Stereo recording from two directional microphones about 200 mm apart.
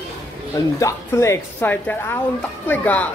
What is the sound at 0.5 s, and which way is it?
A woman's voice, 15° left (ahead or behind).